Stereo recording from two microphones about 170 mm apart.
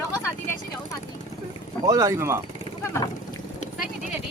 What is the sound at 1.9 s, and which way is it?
Speech, 20° right (ahead or behind).